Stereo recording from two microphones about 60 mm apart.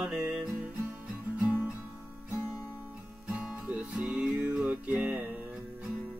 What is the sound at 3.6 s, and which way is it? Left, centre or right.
Music, right.